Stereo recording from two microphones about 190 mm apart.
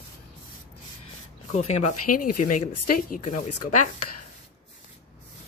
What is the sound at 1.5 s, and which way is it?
Speech, 35° left (ahead or behind).